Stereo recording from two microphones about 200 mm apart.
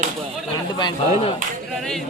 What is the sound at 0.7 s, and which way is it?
Speech, 25° left (ahead or behind).